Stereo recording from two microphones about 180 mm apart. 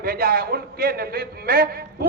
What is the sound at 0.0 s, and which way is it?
A man's voice, 55° right (ahead or behind).